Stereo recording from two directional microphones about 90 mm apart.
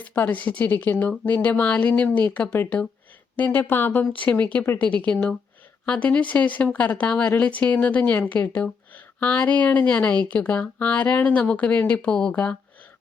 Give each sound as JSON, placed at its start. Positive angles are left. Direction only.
{"t": 0.0, "sound": "speech", "side_deg": 15}